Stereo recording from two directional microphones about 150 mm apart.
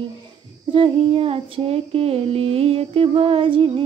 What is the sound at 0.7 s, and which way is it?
Female singing, 35° right (ahead or behind).